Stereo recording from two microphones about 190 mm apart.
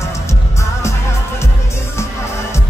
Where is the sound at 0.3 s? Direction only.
15° left (ahead or behind).